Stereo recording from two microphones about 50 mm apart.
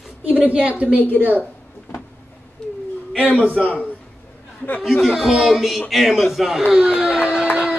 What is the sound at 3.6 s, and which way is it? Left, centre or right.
Speech, centre.